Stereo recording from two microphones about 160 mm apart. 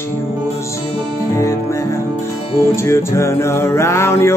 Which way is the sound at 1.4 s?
15° left (ahead or behind).